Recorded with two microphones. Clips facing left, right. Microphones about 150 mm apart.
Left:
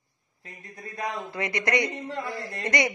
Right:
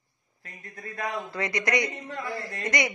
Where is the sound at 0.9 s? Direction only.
20° left (ahead or behind).